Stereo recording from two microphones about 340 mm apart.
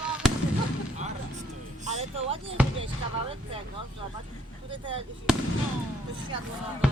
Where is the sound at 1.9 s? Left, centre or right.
Centre.